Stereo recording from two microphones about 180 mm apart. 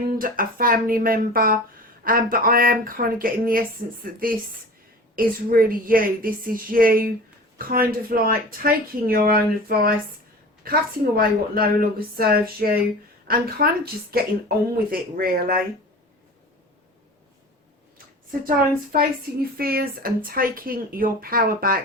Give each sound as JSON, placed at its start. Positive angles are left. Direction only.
{"t": 0.2, "sound": "a woman's voice", "side_deg": -50}
{"t": 5.1, "sound": "a woman's voice", "side_deg": -55}
{"t": 17.9, "sound": "a woman's voice", "side_deg": -50}